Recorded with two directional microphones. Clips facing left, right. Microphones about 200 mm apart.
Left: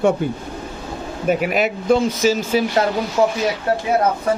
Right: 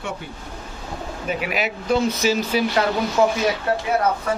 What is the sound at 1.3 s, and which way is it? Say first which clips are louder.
Speech: left 7 dB; 50° left (ahead or behind).